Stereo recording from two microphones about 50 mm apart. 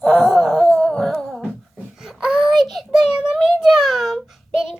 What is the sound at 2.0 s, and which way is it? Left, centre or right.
Child singing, centre.